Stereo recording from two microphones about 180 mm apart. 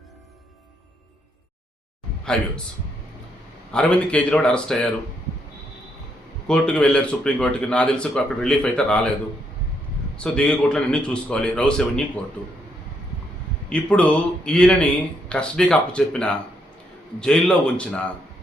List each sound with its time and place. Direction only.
3.7 s speech: 5° left (ahead or behind)
6.5 s speech: 5° left (ahead or behind)
10.2 s speech: 5° left (ahead or behind)
13.7 s a man's voice: 5° left (ahead or behind)